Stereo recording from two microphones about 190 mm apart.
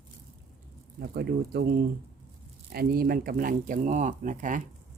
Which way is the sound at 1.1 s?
55° right (ahead or behind).